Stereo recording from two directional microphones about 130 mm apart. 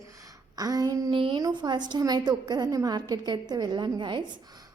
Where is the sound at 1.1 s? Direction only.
40° right (ahead or behind).